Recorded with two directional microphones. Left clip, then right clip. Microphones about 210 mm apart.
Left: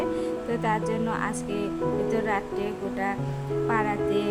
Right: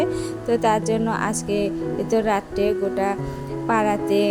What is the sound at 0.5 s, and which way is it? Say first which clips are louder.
Music: right 9 dB; 25° right (ahead or behind).